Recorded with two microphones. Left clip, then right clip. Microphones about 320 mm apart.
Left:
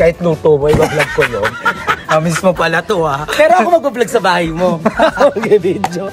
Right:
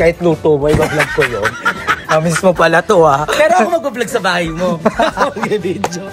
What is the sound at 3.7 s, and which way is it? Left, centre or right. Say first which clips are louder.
Speech: left 4 dB; centre.